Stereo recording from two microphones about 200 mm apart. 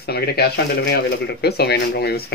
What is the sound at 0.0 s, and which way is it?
Speech, 50° left (ahead or behind).